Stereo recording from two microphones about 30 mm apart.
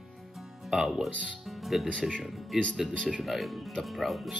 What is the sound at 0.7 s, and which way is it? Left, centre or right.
Speech, centre.